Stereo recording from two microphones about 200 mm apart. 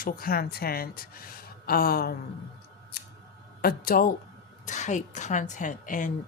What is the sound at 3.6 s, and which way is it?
A woman's voice, 50° left (ahead or behind).